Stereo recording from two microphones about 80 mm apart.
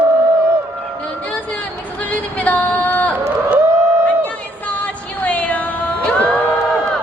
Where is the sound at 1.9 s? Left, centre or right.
Centre.